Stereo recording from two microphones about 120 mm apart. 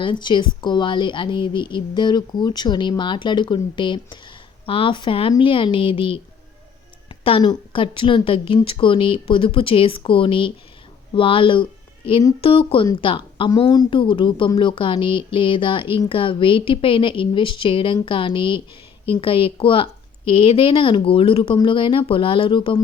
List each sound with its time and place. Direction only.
0.0 s a woman's voice: 40° left (ahead or behind)